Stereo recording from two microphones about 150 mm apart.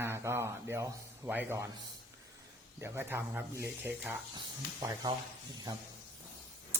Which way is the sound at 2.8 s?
15° right (ahead or behind).